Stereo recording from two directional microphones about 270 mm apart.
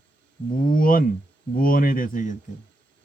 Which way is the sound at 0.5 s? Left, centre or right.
Left.